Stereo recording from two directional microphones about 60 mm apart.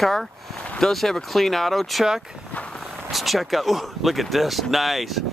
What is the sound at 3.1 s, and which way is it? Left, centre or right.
Speech, centre.